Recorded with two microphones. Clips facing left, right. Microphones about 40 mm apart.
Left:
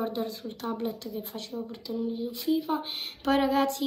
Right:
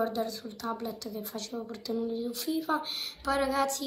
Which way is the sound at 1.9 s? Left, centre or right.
Centre.